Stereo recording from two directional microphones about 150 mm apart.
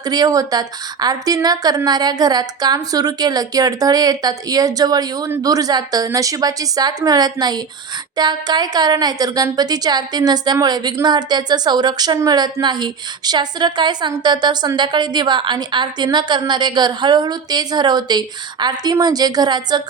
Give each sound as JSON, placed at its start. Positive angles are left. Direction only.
{"t": 0.0, "sound": "a woman's voice", "side_deg": -25}